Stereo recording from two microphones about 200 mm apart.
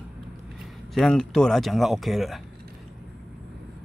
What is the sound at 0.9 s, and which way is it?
Speech, centre (ahead or behind).